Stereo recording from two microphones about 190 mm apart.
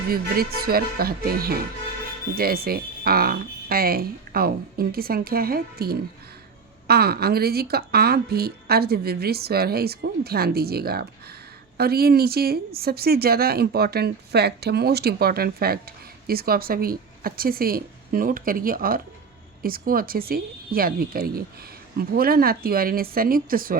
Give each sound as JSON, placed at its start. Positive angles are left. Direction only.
{"t": 0.1, "sound": "speech", "side_deg": -50}